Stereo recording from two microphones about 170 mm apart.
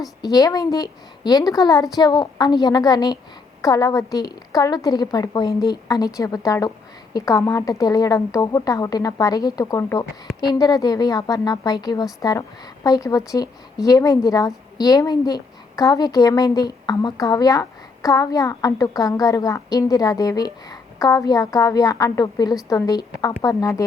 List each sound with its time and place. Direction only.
0.2 s a woman's voice: 20° left (ahead or behind)